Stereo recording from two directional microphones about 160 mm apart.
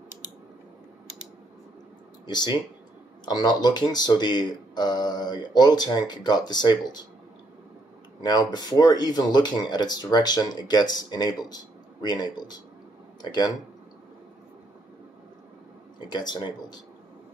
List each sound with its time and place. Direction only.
2.2 s speech: 25° left (ahead or behind)
8.2 s speech: 25° left (ahead or behind)
16.1 s speech: 25° left (ahead or behind)